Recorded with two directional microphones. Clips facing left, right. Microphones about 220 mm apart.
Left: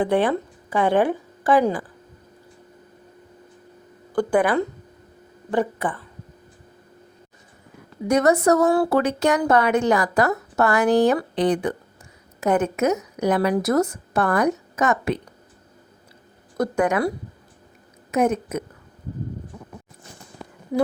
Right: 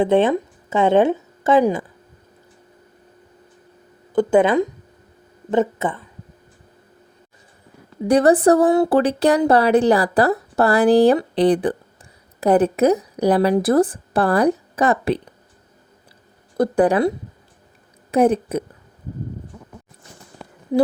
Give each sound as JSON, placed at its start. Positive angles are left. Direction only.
{"t": 0.0, "sound": "a woman's voice", "side_deg": -25}
{"t": 4.1, "sound": "speech", "side_deg": -20}
{"t": 8.0, "sound": "speech", "side_deg": -30}
{"t": 8.6, "sound": "speech", "side_deg": -20}
{"t": 16.6, "sound": "speech", "side_deg": -35}